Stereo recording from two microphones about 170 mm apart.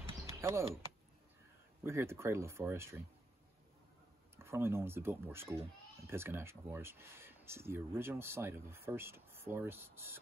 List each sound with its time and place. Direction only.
0.2 s a sound: 15° right (ahead or behind)
1.8 s speech: 15° right (ahead or behind)
4.4 s speech: 15° right (ahead or behind)